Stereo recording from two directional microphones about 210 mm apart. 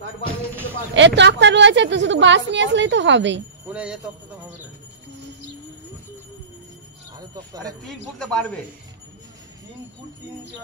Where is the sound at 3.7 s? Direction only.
5° right (ahead or behind).